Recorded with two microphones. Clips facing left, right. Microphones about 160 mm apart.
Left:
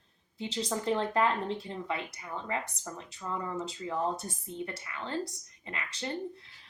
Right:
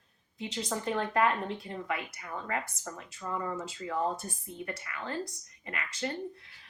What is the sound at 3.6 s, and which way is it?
A woman's voice, 25° left (ahead or behind).